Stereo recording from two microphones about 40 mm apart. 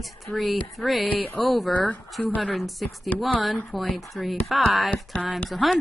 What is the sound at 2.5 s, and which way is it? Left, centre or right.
Speech, centre.